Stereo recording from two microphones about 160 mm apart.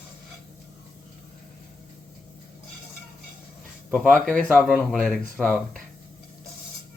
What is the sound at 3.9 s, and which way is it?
Speech, 5° left (ahead or behind).